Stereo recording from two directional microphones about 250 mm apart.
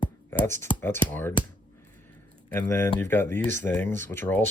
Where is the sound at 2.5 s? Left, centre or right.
Centre.